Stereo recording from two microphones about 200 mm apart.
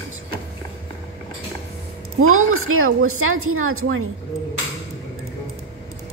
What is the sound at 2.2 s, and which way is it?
A woman's voice, 90° right.